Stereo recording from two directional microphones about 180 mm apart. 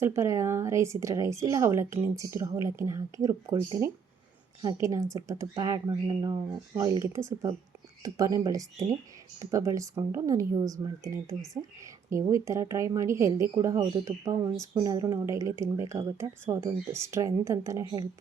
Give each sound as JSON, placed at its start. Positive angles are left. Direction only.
{"t": 0.0, "sound": "speech", "side_deg": -15}